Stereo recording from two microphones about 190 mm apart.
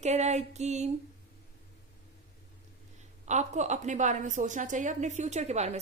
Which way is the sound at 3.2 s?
40° right (ahead or behind).